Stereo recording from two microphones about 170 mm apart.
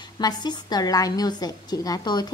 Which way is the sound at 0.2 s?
25° left (ahead or behind).